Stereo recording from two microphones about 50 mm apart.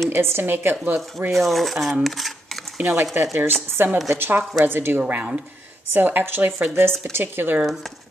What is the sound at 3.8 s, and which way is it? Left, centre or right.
Speech, right.